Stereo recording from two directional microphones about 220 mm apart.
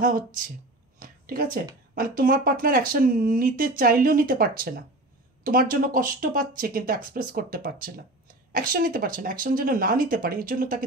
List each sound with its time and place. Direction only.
0.0 s speech: 40° right (ahead or behind)
0.9 s a sound: 40° right (ahead or behind)
2.0 s speech: 40° right (ahead or behind)